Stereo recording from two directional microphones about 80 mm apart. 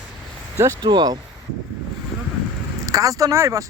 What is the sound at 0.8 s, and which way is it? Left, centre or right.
Speech, right.